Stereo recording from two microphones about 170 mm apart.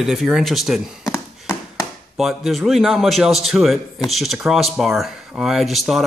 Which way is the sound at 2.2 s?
Centre (ahead or behind).